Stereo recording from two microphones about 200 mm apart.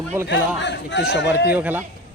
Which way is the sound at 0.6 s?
60° left (ahead or behind).